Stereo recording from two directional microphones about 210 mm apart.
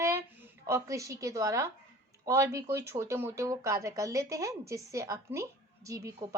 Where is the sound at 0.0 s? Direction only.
10° right (ahead or behind).